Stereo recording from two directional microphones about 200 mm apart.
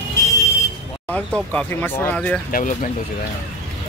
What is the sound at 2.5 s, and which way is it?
Speech, 40° left (ahead or behind).